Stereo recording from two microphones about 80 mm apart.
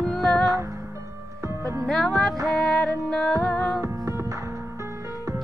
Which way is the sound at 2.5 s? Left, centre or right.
Centre.